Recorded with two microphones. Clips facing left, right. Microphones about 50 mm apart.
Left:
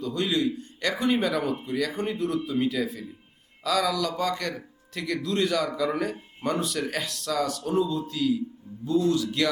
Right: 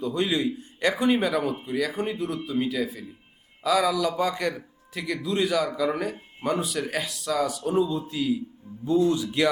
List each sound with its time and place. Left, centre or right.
0.0 s a man's voice: centre